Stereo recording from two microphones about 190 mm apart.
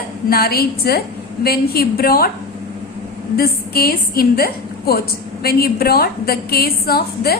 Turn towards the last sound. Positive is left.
turn(degrees=55)  # may be behind; listen again after turning